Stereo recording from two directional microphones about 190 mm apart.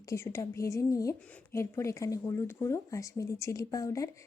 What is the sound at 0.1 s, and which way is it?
Speech, 15° left (ahead or behind).